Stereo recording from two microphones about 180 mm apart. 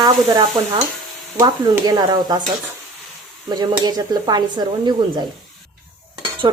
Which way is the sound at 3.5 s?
20° right (ahead or behind).